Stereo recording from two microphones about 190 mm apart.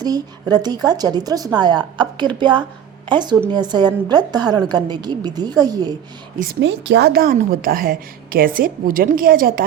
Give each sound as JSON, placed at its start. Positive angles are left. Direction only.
{"t": 0.0, "sound": "a woman's voice", "side_deg": -20}
{"t": 6.4, "sound": "a woman's voice", "side_deg": -60}